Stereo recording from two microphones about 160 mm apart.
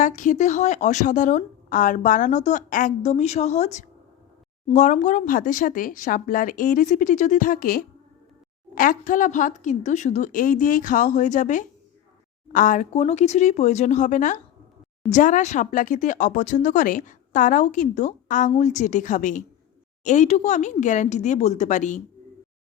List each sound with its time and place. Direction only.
0.0 s a woman's voice: 50° left (ahead or behind)